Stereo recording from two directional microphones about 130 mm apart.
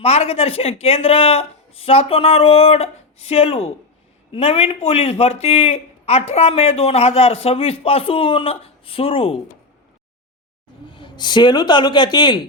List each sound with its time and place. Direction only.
0.0 s a man's voice: 50° left (ahead or behind)
10.8 s a man's voice: 40° left (ahead or behind)